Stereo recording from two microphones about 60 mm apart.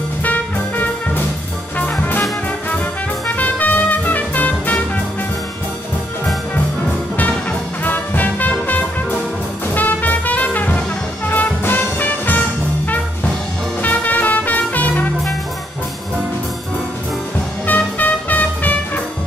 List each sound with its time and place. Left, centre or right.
0.2 s music: left
1.8 s brass instrument: left
3.3 s music: left
7.8 s music: left
13.8 s music: left
17.6 s music: left